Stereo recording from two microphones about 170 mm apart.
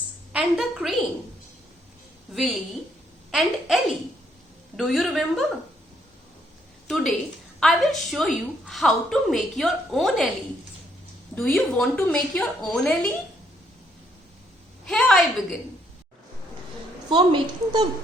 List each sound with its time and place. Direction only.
0.3 s a woman's voice: 5° right (ahead or behind)
2.3 s a woman's voice: centre (ahead or behind)
6.8 s a woman's voice: centre (ahead or behind)
11.3 s a woman's voice: centre (ahead or behind)
14.8 s a woman's voice: 5° left (ahead or behind)
17.1 s a woman's voice: 25° right (ahead or behind)